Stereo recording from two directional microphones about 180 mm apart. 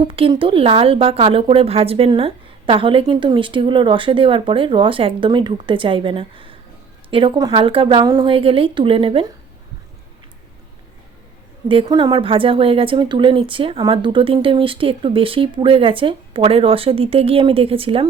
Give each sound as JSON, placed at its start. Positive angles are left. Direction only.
{"t": 0.1, "sound": "a woman's voice", "side_deg": -30}
{"t": 11.7, "sound": "a woman's voice", "side_deg": -25}